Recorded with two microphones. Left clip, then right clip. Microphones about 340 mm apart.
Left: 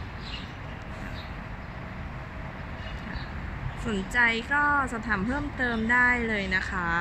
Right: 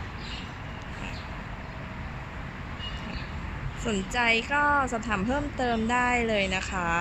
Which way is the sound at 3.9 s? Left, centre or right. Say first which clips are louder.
Left 1 dB; centre.